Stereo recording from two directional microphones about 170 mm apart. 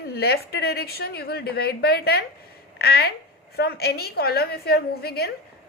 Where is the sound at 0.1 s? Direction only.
65° left (ahead or behind).